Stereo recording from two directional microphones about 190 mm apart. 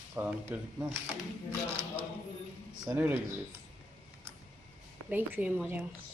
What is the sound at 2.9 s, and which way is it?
Speech, 10° right (ahead or behind).